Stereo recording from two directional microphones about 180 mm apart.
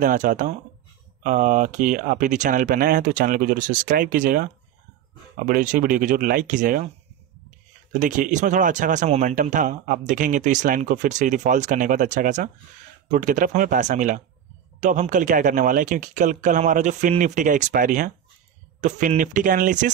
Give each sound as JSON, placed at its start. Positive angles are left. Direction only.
{"t": 0.0, "sound": "speech", "side_deg": -45}
{"t": 8.0, "sound": "speech", "side_deg": -45}